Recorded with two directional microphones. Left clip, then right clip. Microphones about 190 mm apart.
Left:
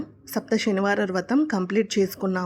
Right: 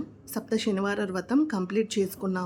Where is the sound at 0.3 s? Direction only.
20° left (ahead or behind).